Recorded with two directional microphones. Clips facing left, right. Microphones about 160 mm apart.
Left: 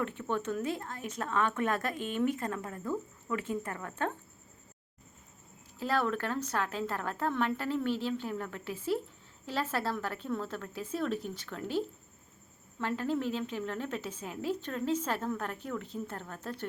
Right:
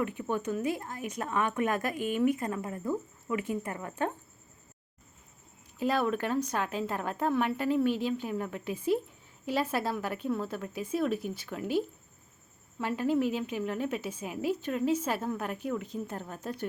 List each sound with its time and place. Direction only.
0.0 s speech: 10° right (ahead or behind)
5.8 s speech: 15° right (ahead or behind)
12.8 s speech: 10° right (ahead or behind)